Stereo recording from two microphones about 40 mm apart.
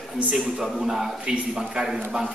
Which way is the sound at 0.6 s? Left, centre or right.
Centre.